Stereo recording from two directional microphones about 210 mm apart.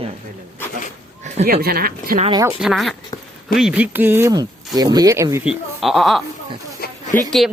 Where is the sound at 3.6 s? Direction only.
5° right (ahead or behind).